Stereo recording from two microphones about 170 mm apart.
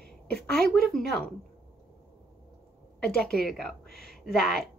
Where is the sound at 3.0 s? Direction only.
5° left (ahead or behind).